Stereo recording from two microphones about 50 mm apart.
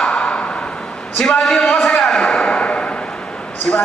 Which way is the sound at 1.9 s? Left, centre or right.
Centre.